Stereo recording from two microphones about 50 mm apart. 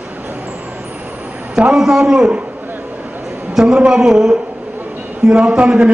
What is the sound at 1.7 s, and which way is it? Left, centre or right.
Speech, centre.